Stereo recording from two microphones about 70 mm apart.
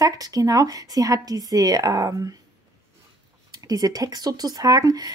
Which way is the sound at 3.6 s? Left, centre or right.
Right.